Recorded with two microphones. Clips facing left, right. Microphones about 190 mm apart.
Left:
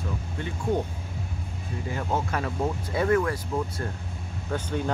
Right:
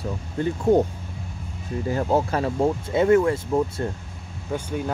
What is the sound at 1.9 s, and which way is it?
Speech, 35° right (ahead or behind).